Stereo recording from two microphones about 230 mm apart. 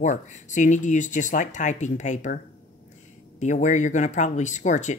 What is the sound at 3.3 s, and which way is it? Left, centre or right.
Speech, left.